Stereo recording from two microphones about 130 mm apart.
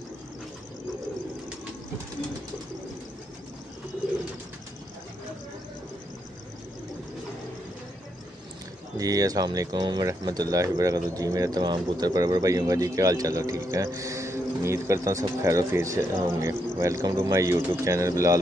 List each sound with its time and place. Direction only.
8.9 s speech: 25° right (ahead or behind)